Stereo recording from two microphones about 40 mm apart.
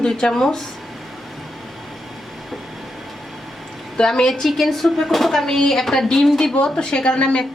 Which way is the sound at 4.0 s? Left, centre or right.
Centre.